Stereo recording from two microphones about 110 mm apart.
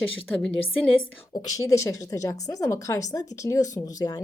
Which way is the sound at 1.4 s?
30° left (ahead or behind).